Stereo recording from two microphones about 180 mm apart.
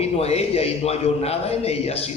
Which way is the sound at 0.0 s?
35° left (ahead or behind).